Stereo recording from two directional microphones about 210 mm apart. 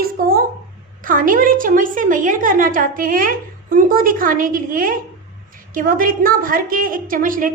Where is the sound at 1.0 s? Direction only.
40° right (ahead or behind).